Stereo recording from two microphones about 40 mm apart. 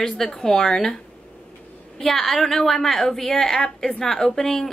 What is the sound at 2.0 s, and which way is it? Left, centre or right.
A woman's voice, centre.